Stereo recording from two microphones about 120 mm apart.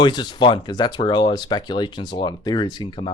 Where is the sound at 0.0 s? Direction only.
40° left (ahead or behind).